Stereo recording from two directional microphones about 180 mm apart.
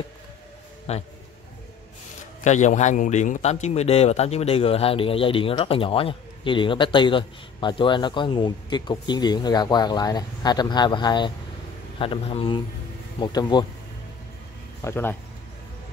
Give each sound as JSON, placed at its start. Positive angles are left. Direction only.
{"t": 0.9, "sound": "a man's voice", "side_deg": 35}
{"t": 2.4, "sound": "a man's voice", "side_deg": 40}
{"t": 14.8, "sound": "speech", "side_deg": 15}